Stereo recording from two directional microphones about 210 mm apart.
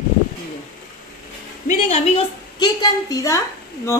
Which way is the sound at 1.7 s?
35° left (ahead or behind).